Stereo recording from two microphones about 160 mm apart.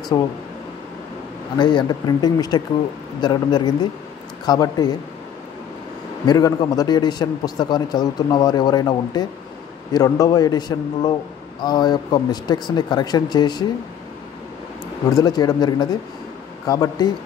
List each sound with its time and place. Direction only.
0.1 s a man's voice: 25° left (ahead or behind)
1.6 s a man's voice: 30° left (ahead or behind)
6.2 s a man's voice: 25° left (ahead or behind)
15.0 s a man's voice: 25° left (ahead or behind)